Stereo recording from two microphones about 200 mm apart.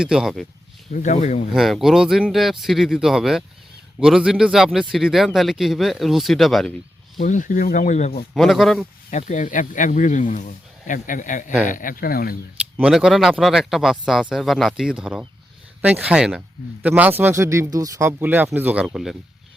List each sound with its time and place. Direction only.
0.0 s a man's voice: 5° right (ahead or behind)
0.9 s speech: 35° left (ahead or behind)
1.5 s a man's voice: centre (ahead or behind)
7.2 s speech: 40° left (ahead or behind)
8.4 s a man's voice: centre (ahead or behind)
9.0 s speech: 35° left (ahead or behind)
12.7 s a man's voice: 5° right (ahead or behind)